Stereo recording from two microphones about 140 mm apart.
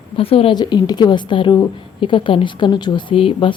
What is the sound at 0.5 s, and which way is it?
Speech, 30° left (ahead or behind).